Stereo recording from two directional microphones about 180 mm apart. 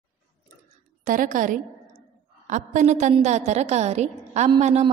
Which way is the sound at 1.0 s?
45° right (ahead or behind).